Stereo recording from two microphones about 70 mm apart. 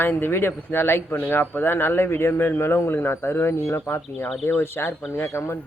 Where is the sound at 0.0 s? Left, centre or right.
Left.